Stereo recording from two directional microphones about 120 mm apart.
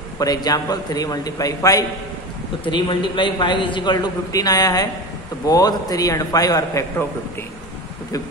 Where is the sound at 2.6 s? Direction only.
40° left (ahead or behind).